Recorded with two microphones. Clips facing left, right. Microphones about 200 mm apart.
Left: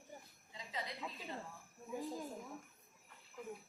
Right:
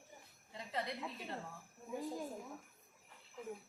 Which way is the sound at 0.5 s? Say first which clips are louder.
Right 4 dB; 60° right (ahead or behind).